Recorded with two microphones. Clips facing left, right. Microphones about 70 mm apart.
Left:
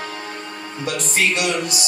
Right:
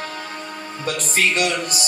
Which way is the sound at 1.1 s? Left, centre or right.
Right.